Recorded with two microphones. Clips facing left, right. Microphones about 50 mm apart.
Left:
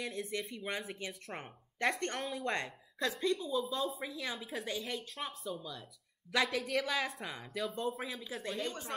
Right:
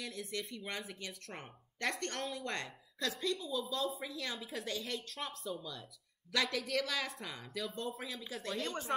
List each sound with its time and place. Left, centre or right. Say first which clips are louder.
0.2 s speech: left 3 dB; left
0.7 s a woman's voice: left 3 dB; centre
1.0 s a woman's voice: left 3 dB; centre
2.5 s a woman's voice: left 4 dB; left
3.3 s speech: left 3 dB; centre
4.0 s a woman's voice: left 2 dB; centre